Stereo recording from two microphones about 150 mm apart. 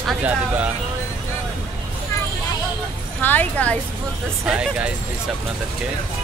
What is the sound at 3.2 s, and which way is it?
Speech, 10° left (ahead or behind).